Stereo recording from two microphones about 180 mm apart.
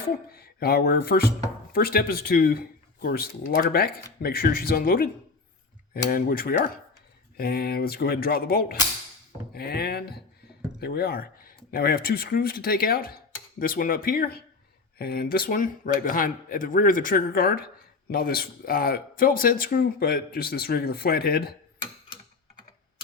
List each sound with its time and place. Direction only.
0.3 s speech: 60° left (ahead or behind)
6.1 s speech: 50° left (ahead or behind)